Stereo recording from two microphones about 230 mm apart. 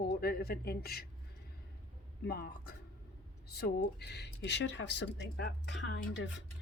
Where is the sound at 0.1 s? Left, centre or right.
Left.